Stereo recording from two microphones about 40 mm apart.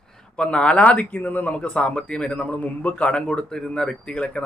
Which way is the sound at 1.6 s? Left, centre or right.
Left.